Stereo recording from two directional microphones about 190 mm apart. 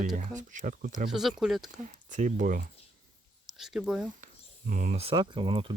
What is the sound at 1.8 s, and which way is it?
Speech, 40° right (ahead or behind).